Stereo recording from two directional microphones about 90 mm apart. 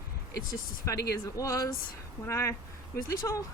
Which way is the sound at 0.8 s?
35° left (ahead or behind).